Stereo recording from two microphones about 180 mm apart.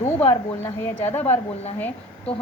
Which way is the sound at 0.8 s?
15° left (ahead or behind).